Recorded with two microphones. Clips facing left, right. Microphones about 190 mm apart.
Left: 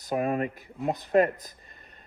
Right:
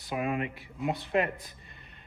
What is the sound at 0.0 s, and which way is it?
Speech, 40° left (ahead or behind).